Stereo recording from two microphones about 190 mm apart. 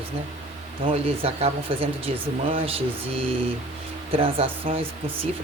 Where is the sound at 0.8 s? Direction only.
30° right (ahead or behind).